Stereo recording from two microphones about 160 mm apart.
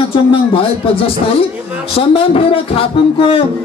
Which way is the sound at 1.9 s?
35° left (ahead or behind).